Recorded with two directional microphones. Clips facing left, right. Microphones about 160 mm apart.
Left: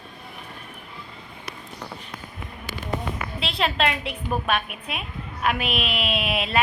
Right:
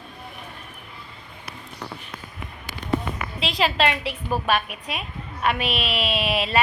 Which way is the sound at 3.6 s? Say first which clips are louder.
Right 2 dB; centre (ahead or behind).